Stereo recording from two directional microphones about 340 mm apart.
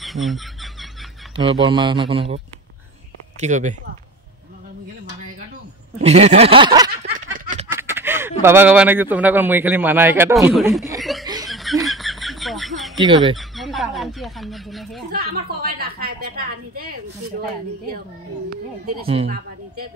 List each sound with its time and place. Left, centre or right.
0.0 s a sound: centre
1.4 s speech: centre
5.9 s speech: centre
7.2 s a sound: right
7.6 s speech: centre
11.4 s a sound: centre
12.9 s fowl: centre
13.4 s speech: centre
15.1 s a woman's voice: right
18.9 s speech: centre
19.2 s a woman's voice: right